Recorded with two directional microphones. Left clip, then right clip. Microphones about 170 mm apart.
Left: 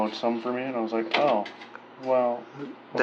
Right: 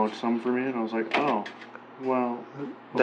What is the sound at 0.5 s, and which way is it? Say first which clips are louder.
Speech: even; 35° left (ahead or behind).